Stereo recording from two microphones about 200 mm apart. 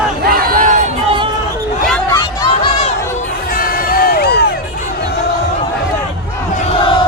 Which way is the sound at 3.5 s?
45° left (ahead or behind).